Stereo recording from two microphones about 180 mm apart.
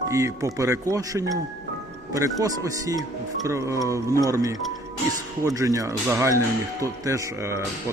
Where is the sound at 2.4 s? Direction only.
20° right (ahead or behind).